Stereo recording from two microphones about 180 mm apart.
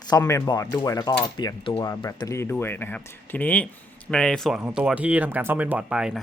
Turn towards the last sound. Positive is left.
turn(degrees=-5)  # may be behind; listen again after turning